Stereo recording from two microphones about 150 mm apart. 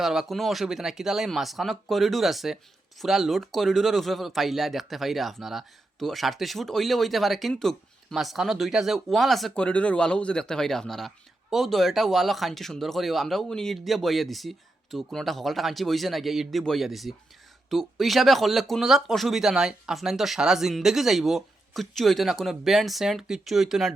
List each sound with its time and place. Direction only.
0.0 s speech: 5° right (ahead or behind)